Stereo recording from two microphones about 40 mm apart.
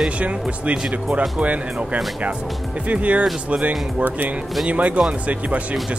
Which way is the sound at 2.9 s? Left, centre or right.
Right.